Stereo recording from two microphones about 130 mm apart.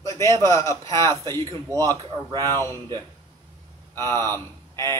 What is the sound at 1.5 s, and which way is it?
Speech, 25° right (ahead or behind).